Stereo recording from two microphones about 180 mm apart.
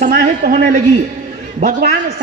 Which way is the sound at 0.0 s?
50° right (ahead or behind).